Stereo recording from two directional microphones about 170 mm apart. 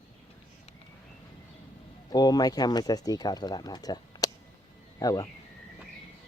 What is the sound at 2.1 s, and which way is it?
Speech, 25° left (ahead or behind).